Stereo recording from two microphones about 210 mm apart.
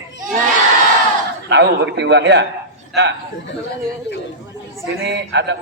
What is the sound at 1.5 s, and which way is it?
Speech, 55° right (ahead or behind).